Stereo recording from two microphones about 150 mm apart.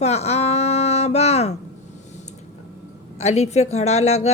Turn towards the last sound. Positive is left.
turn(degrees=45)  # may be behind; listen again after turning